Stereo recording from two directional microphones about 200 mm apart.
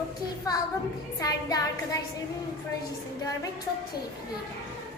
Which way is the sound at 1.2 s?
20° left (ahead or behind).